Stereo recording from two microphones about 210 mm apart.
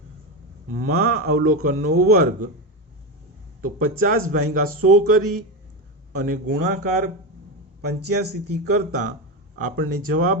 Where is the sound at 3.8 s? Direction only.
45° right (ahead or behind).